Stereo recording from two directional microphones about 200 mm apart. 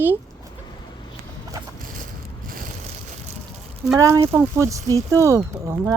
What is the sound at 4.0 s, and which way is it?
Speech, 15° right (ahead or behind).